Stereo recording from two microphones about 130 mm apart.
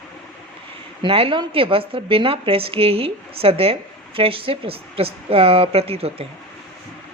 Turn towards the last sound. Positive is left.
turn(degrees=-50)  # may be behind; listen again after turning